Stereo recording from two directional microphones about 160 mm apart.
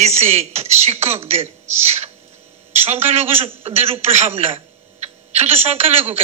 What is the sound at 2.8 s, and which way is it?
A man's voice, 40° right (ahead or behind).